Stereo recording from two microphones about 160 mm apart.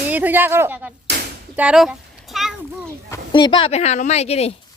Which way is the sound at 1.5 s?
5° right (ahead or behind).